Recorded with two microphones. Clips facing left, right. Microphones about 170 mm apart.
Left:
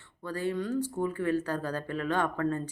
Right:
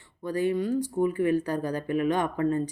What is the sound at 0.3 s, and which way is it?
Speech, 15° right (ahead or behind).